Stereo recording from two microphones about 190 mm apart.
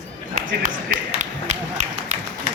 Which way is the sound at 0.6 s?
40° right (ahead or behind).